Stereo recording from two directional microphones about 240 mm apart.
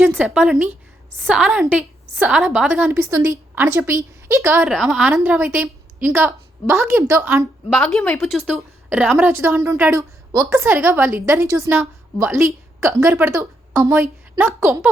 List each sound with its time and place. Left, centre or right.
0.0 s a woman's voice: centre